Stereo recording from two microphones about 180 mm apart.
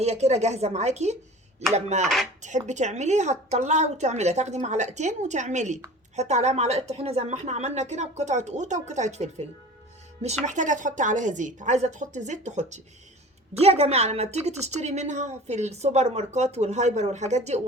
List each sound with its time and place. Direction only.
0.0 s a woman's voice: 40° right (ahead or behind)